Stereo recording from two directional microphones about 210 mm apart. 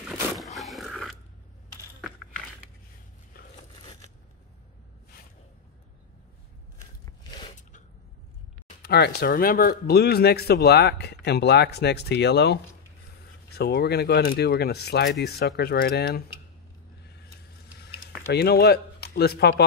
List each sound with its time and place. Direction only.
0.4 s roaring cats: centre (ahead or behind)
7.1 s biting: 20° left (ahead or behind)
8.6 s speech: 50° left (ahead or behind)
17.8 s a sound: 50° left (ahead or behind)